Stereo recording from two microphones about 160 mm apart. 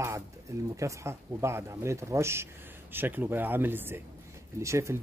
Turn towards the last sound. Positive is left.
turn(degrees=-20)  # may be behind; listen again after turning